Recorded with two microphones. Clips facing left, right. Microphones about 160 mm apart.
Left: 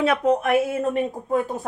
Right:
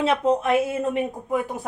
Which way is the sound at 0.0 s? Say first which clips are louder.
Left 1 dB; 25° right (ahead or behind).